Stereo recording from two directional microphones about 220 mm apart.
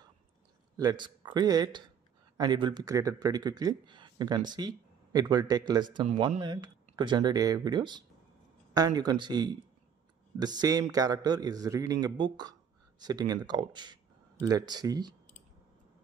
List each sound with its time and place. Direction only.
0.7 s a man's voice: 20° right (ahead or behind)